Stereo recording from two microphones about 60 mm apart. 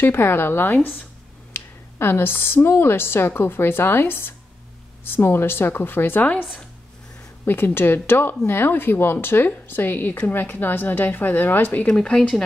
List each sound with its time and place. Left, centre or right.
0.0 s a woman's voice: left
1.5 s finger snapping: left
2.8 s a woman's voice: left
7.4 s a woman's voice: left
11.9 s speech: centre